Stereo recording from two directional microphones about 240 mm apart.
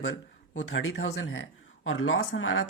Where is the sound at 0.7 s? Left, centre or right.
Left.